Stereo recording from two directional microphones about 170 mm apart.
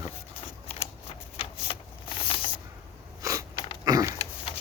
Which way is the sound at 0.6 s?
40° left (ahead or behind).